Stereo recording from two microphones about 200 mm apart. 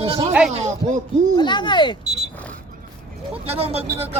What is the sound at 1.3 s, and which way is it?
Speech, 20° left (ahead or behind).